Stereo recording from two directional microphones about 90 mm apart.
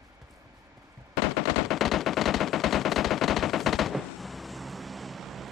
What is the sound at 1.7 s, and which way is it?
Machine gun, centre (ahead or behind).